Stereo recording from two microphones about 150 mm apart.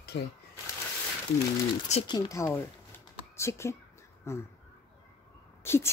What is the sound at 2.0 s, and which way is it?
Speech, 25° left (ahead or behind).